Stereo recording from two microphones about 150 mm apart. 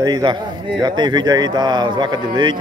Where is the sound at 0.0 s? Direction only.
30° right (ahead or behind).